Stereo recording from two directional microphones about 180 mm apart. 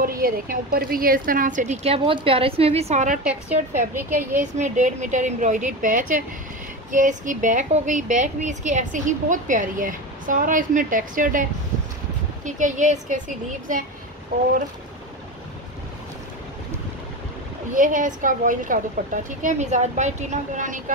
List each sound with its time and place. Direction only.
0.0 s speech: 55° right (ahead or behind)
3.9 s speech: 10° right (ahead or behind)
4.4 s speech: 40° right (ahead or behind)
12.4 s speech: 45° right (ahead or behind)
17.7 s speech: 45° right (ahead or behind)